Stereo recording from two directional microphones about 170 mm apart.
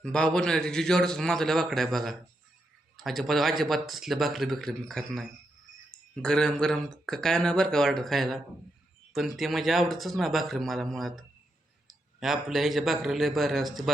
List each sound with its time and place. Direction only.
0.0 s speech: 5° left (ahead or behind)
6.2 s speech: 5° left (ahead or behind)